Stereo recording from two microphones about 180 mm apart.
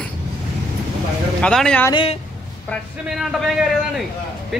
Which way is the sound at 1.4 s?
5° left (ahead or behind).